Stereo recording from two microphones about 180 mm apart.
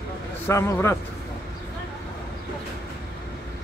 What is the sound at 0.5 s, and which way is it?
Speech, 15° left (ahead or behind).